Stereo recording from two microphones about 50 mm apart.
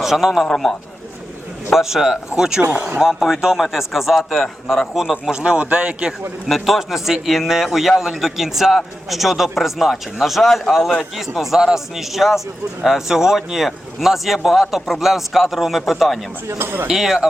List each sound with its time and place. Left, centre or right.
0.0 s a man's voice: centre
0.4 s a man's voice: centre
1.7 s a man's voice: centre
5.3 s speech: right
6.5 s a man's voice: centre
16.6 s speech: right
16.9 s a man's voice: centre